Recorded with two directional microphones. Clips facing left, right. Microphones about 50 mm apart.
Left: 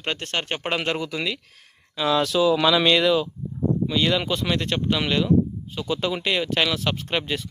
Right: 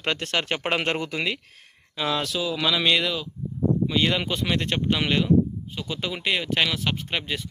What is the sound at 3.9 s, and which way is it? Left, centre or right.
Speech, centre.